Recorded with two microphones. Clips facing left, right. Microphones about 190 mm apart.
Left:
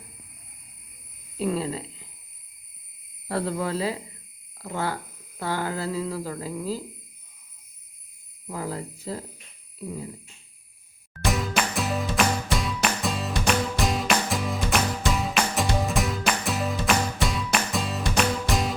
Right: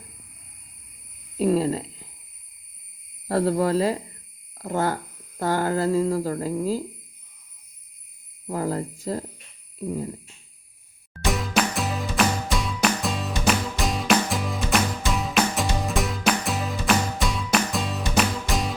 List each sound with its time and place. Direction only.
1.4 s speech: 40° right (ahead or behind)
3.2 s cricket: 40° right (ahead or behind)
4.5 s speech: 45° right (ahead or behind)
8.4 s speech: 45° right (ahead or behind)
9.7 s a sound: 45° right (ahead or behind)
11.3 s music: centre (ahead or behind)